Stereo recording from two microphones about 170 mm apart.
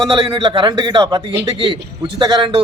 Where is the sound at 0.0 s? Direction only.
30° right (ahead or behind).